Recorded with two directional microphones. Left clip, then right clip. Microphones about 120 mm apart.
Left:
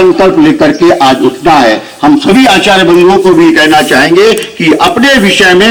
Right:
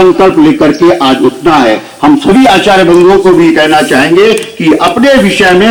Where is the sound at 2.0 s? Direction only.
25° left (ahead or behind).